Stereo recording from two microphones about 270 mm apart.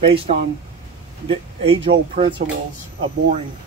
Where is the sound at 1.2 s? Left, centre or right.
Centre.